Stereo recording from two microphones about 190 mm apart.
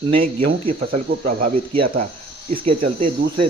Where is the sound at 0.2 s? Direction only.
45° right (ahead or behind).